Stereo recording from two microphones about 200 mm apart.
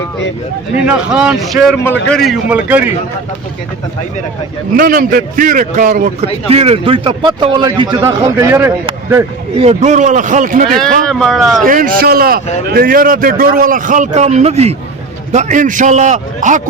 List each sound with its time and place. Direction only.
0.9 s a man's voice: 5° right (ahead or behind)
1.8 s a man's voice: 10° left (ahead or behind); by 2.9 s 5° right (ahead or behind)
4.8 s a man's voice: 45° right (ahead or behind)
6.5 s a man's voice: 30° right (ahead or behind); by 9.2 s 15° right (ahead or behind)
9.6 s a man's voice: 35° right (ahead or behind)
10.7 s a man's voice: 5° left (ahead or behind)
11.6 s a man's voice: 45° right (ahead or behind)